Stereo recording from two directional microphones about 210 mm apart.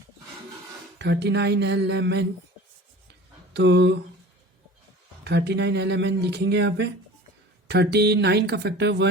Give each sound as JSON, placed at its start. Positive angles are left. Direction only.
{"t": 0.9, "sound": "speech", "side_deg": -55}
{"t": 3.1, "sound": "a sound", "side_deg": -55}
{"t": 5.2, "sound": "speech", "side_deg": -55}